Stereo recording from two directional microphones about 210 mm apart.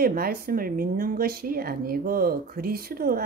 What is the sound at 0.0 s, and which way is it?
A woman's voice, 45° right (ahead or behind).